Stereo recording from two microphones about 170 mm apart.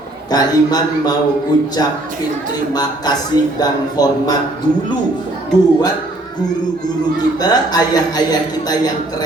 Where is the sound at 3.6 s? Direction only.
20° left (ahead or behind).